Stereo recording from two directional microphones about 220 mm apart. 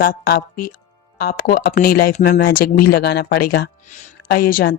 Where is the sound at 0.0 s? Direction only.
45° left (ahead or behind).